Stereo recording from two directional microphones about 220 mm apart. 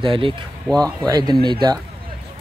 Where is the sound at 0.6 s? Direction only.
5° left (ahead or behind).